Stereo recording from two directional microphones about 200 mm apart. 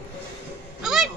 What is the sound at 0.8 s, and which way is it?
Goose, centre (ahead or behind).